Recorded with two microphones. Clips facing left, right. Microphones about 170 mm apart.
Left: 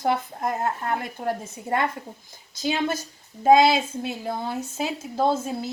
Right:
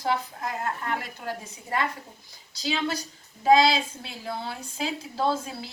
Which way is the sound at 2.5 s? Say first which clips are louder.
Left 3 dB; 50° left (ahead or behind).